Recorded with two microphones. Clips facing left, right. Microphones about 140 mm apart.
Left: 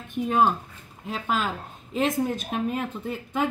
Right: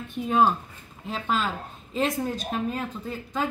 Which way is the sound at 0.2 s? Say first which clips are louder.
Even; 5° left (ahead or behind).